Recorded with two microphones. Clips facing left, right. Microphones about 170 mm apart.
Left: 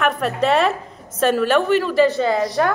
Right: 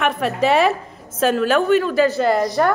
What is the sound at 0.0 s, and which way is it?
A woman's voice, 5° right (ahead or behind).